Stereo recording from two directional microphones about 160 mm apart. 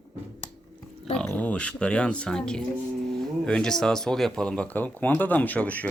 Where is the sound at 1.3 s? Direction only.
10° left (ahead or behind).